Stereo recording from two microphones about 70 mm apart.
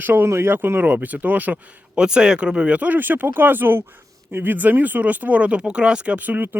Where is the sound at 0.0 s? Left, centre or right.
Right.